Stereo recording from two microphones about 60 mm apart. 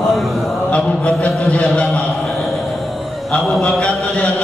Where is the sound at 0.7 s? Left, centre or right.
Left.